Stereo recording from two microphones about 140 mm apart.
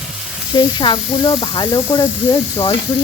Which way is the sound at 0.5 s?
30° left (ahead or behind).